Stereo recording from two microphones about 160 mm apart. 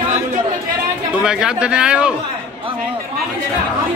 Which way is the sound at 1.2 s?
5° right (ahead or behind).